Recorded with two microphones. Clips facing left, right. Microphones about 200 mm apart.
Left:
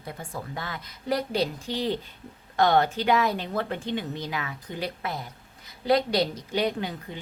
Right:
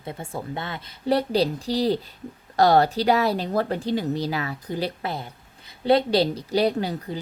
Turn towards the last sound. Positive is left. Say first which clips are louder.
# right 5 dB
turn(degrees=-35)  # may be behind; listen again after turning